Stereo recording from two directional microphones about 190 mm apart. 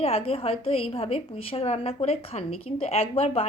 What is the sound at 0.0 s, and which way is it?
A woman's voice, 30° left (ahead or behind).